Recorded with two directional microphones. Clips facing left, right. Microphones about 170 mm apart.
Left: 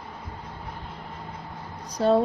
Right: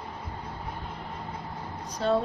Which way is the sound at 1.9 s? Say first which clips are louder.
Left 5 dB; 40° left (ahead or behind).